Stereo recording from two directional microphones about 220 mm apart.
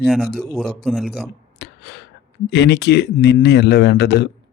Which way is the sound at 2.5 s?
50° left (ahead or behind).